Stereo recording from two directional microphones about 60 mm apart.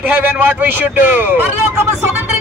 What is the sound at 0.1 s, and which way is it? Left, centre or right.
A man's voice, right.